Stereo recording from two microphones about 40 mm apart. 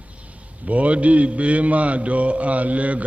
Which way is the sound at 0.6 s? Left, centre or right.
Right.